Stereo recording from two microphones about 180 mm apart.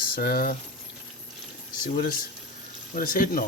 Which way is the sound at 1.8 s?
50° left (ahead or behind).